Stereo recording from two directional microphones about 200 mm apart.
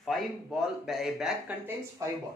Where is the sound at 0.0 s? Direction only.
Centre (ahead or behind).